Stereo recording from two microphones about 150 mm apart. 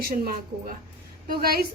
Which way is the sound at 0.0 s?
80° right.